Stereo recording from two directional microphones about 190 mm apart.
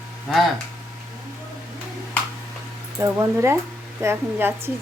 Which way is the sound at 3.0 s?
15° right (ahead or behind).